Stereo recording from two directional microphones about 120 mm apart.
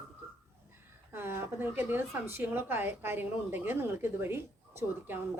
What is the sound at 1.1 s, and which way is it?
Speech, 20° right (ahead or behind).